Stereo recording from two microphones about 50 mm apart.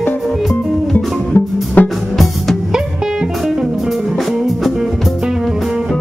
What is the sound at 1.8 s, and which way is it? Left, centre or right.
Music, left.